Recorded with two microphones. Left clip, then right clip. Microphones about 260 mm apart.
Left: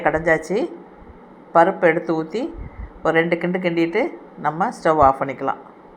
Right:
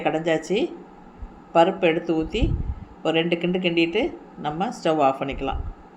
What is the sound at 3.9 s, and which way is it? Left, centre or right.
A woman's voice, centre.